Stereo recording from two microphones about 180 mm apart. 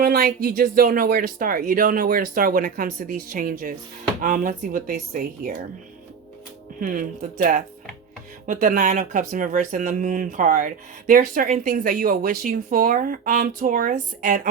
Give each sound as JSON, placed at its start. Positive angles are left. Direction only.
{"t": 0.0, "sound": "speech", "side_deg": -55}
{"t": 6.7, "sound": "speech", "side_deg": -50}
{"t": 8.4, "sound": "speech", "side_deg": -50}